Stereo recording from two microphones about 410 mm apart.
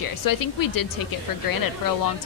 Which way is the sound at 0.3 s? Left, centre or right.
Left.